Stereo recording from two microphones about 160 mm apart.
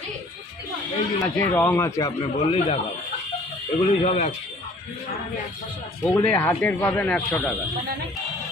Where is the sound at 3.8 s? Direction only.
40° left (ahead or behind).